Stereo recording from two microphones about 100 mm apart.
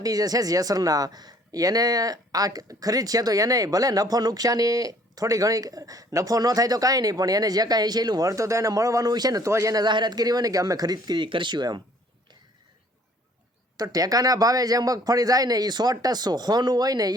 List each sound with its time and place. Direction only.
0.0 s speech: 40° right (ahead or behind)
13.7 s speech: 40° right (ahead or behind)